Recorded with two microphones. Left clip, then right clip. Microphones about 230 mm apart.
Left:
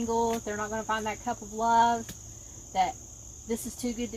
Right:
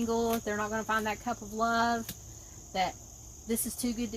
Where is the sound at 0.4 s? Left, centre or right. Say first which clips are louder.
Even; right.